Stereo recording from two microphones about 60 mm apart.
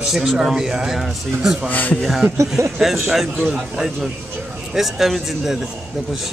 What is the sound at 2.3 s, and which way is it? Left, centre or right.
Speech, right.